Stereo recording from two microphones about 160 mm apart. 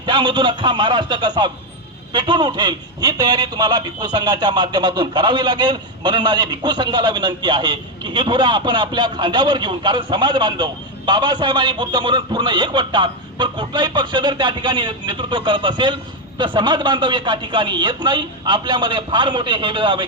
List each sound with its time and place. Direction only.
0.0 s a man's voice: 30° right (ahead or behind)